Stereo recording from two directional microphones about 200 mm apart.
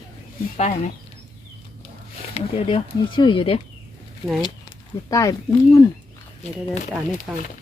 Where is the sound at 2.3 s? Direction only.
30° left (ahead or behind).